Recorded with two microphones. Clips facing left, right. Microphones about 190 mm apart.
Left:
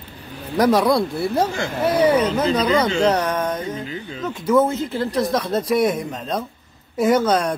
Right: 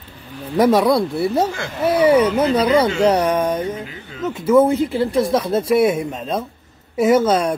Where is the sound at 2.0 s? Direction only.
10° right (ahead or behind).